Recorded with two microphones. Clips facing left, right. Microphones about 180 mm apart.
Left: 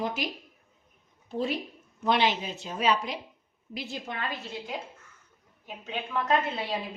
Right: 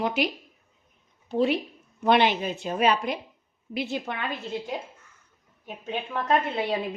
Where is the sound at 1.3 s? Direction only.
70° right (ahead or behind).